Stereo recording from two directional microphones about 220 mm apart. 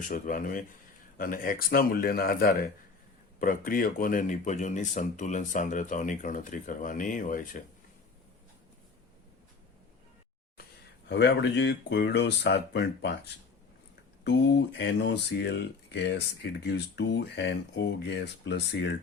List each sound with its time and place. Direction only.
0.1 s speech: 35° left (ahead or behind)
11.1 s speech: 50° left (ahead or behind)
14.3 s speech: 50° left (ahead or behind)